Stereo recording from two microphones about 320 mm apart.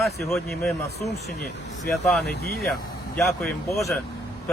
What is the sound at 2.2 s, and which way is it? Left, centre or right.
Speech, left.